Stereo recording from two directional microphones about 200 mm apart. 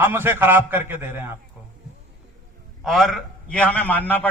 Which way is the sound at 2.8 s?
Centre (ahead or behind).